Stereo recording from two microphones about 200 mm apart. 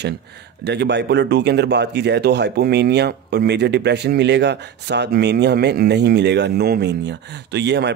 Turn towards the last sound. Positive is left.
turn(degrees=-60)  # may be behind; listen again after turning